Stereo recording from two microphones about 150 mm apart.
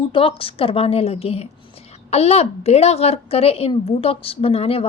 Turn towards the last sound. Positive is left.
turn(degrees=40)  # may be behind; listen again after turning